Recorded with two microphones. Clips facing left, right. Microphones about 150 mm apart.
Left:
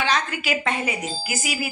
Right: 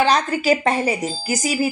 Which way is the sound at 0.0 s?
40° right (ahead or behind).